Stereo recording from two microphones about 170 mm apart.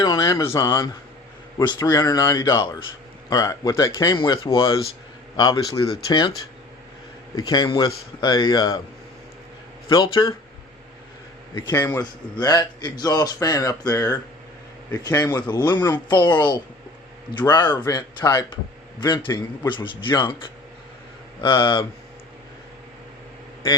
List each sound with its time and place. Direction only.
0.0 s a man's voice: 20° left (ahead or behind)
7.4 s a man's voice: 25° left (ahead or behind)
9.9 s a man's voice: 25° left (ahead or behind)
11.7 s a man's voice: 20° left (ahead or behind)
21.4 s a man's voice: 30° left (ahead or behind)